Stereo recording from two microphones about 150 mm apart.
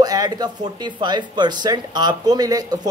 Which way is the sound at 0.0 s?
25° right (ahead or behind).